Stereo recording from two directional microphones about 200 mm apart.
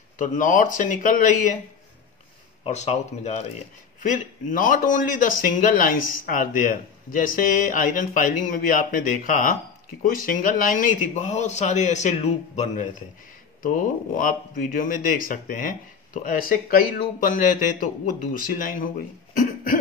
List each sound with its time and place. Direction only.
0.2 s speech: 40° left (ahead or behind)
2.6 s a man's voice: 35° left (ahead or behind)